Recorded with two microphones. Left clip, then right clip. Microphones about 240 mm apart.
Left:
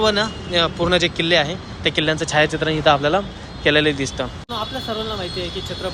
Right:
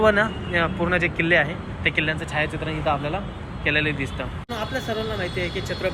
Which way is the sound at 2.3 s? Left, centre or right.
Left.